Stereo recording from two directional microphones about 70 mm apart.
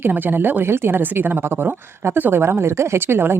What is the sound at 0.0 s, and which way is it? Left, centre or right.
A woman's voice, right.